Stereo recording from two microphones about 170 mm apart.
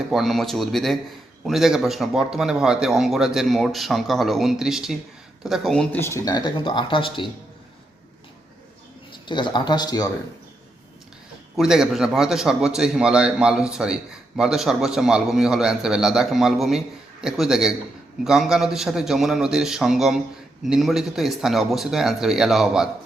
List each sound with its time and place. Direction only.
0.1 s a man's voice: centre (ahead or behind); by 7.3 s 30° left (ahead or behind)
9.2 s speech: 25° left (ahead or behind)
11.5 s a man's voice: 5° right (ahead or behind)